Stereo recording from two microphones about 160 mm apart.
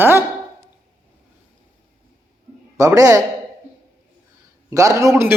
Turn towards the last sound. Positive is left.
turn(degrees=-15)  # may be behind; listen again after turning